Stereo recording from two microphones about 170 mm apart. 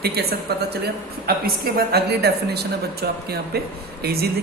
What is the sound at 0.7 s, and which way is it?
Speech, 65° right (ahead or behind).